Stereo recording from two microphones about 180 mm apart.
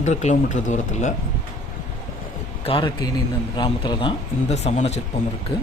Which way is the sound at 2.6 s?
25° left (ahead or behind).